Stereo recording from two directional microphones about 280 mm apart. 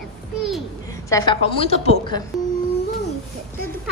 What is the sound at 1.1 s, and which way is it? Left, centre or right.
A woman's voice, centre.